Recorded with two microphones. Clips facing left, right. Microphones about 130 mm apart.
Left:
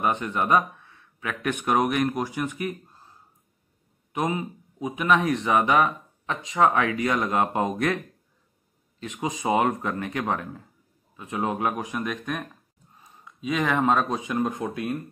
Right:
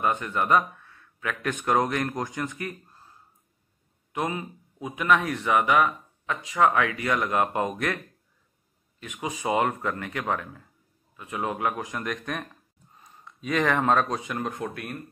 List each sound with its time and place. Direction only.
0.0 s speech: 20° left (ahead or behind)
4.1 s speech: 15° left (ahead or behind)
9.0 s speech: 25° left (ahead or behind)